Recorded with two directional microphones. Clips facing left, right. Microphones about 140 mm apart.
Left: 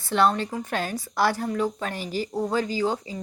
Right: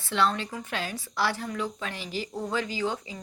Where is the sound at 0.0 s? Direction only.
45° left (ahead or behind).